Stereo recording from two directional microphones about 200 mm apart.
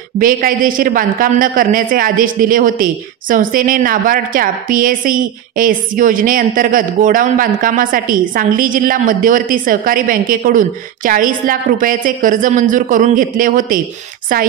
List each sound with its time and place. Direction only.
0.2 s a woman's voice: 45° right (ahead or behind)